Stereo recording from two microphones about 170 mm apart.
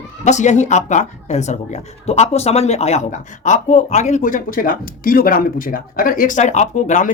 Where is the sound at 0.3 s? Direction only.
45° left (ahead or behind).